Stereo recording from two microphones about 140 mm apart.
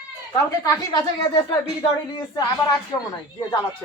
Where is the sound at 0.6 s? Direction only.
35° left (ahead or behind).